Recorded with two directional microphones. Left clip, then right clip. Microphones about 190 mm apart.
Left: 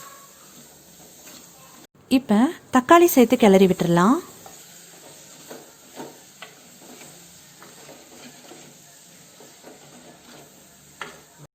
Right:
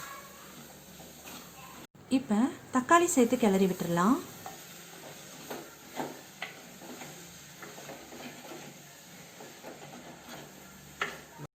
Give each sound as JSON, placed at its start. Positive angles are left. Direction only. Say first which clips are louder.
{"t": 2.0, "sound": "a woman's voice", "louder": "left 10 dB", "side_deg": 45}